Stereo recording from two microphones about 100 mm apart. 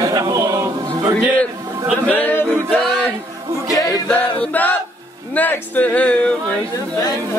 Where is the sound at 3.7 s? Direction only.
35° left (ahead or behind).